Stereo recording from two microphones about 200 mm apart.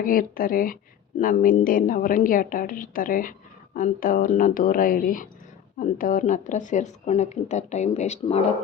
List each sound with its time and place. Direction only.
0.0 s a woman's voice: 45° left (ahead or behind)